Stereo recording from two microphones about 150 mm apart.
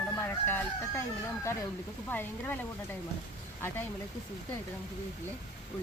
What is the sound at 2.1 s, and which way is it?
Speech, 15° left (ahead or behind).